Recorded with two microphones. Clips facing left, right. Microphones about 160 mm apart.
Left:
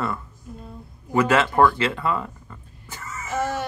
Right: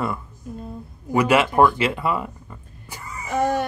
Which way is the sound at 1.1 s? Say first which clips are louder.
Right 1 dB; 15° right (ahead or behind).